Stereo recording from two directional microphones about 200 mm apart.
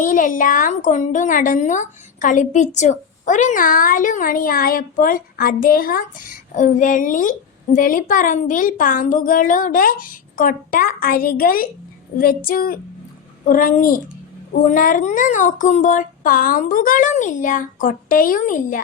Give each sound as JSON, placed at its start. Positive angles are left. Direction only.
{"t": 0.0, "sound": "a woman's voice", "side_deg": 40}